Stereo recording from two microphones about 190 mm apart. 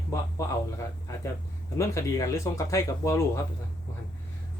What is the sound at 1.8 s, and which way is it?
Speech, 15° left (ahead or behind).